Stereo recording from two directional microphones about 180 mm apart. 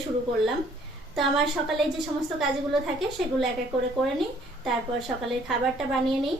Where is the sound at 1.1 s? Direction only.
Centre (ahead or behind).